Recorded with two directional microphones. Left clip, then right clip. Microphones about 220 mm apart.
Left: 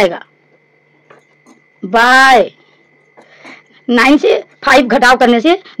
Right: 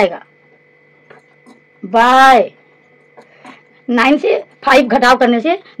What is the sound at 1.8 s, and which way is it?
A woman's voice, 35° left (ahead or behind).